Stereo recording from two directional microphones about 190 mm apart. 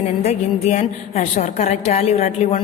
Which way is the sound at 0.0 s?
35° left (ahead or behind).